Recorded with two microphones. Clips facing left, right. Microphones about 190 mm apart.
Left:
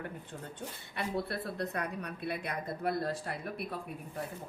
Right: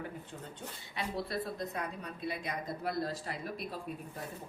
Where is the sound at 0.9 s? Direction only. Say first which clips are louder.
Left 1 dB; 60° left (ahead or behind).